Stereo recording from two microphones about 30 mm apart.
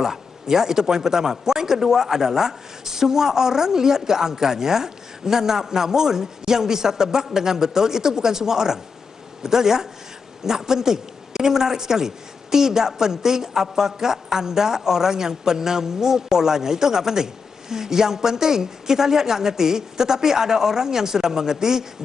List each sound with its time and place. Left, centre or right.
0.0 s a woman's voice: centre